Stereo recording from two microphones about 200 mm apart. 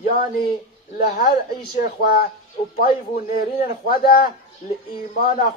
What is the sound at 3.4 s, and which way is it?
Speech, 45° left (ahead or behind).